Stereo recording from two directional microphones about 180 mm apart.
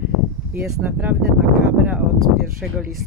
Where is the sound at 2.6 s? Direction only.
Centre (ahead or behind).